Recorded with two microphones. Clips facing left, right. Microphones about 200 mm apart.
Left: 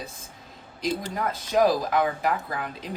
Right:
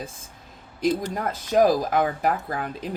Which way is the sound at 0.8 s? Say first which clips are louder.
Right 4 dB; 45° right (ahead or behind).